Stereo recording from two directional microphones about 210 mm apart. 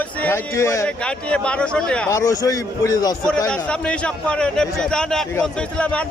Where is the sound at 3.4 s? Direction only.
5° left (ahead or behind).